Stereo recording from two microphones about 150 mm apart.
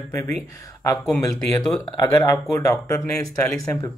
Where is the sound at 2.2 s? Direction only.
20° left (ahead or behind).